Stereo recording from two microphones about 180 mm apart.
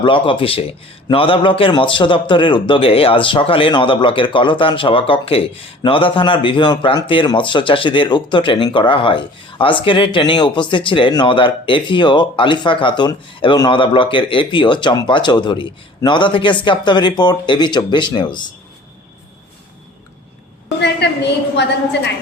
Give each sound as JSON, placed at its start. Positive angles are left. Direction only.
{"t": 0.0, "sound": "a man's voice", "side_deg": 30}
{"t": 21.0, "sound": "a woman's voice", "side_deg": 65}